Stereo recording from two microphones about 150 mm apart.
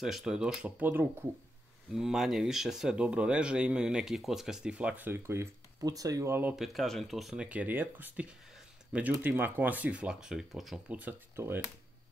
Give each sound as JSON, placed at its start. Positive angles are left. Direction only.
{"t": 0.0, "sound": "speech", "side_deg": -5}
{"t": 2.0, "sound": "speech", "side_deg": 0}
{"t": 6.5, "sound": "speech", "side_deg": 0}